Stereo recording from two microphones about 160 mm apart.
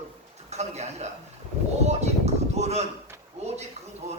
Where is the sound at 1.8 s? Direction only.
45° right (ahead or behind).